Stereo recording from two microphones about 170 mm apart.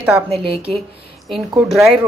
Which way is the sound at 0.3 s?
35° right (ahead or behind).